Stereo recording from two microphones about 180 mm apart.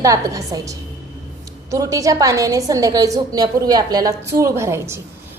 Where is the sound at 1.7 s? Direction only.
20° right (ahead or behind).